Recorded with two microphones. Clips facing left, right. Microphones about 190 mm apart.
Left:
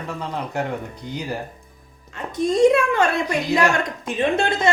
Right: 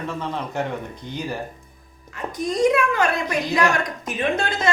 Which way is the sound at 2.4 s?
25° left (ahead or behind).